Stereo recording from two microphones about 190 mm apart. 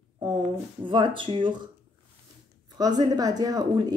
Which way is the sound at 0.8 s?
25° right (ahead or behind).